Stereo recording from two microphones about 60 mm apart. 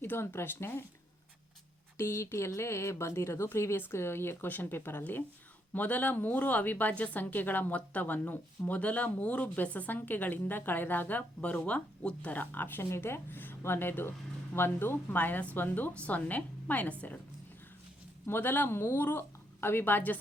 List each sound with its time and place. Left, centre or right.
0.0 s speech: left
2.0 s a woman's voice: left
18.3 s speech: left